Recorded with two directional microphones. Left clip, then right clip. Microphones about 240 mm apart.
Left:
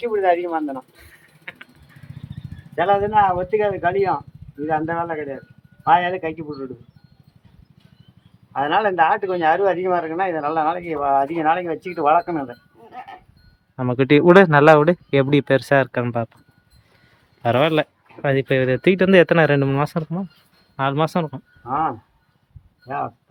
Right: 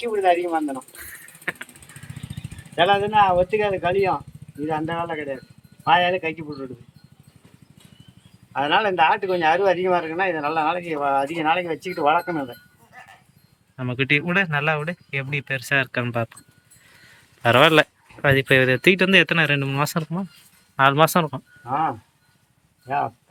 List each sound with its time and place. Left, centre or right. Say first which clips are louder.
0.0 s speech: left 1 dB; centre
2.7 s speech: left 1 dB; centre
8.5 s speech: left 2 dB; centre
13.7 s speech: left 5 dB; centre
17.4 s speech: right 3 dB; centre